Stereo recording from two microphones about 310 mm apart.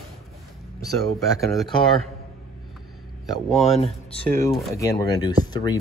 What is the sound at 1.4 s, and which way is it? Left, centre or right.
Speech, centre.